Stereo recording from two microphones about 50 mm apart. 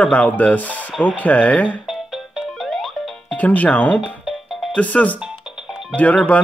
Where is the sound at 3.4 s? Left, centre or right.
Left.